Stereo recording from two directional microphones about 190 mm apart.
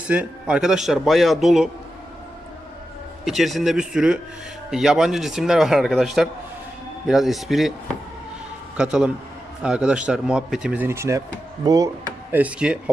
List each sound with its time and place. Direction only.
0.1 s a man's voice: 5° right (ahead or behind)
3.2 s a man's voice: centre (ahead or behind)
8.8 s a man's voice: 5° right (ahead or behind)
12.3 s speech: 5° right (ahead or behind)